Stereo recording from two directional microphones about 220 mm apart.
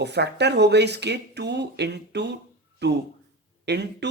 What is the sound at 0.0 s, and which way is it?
Speech, 50° right (ahead or behind).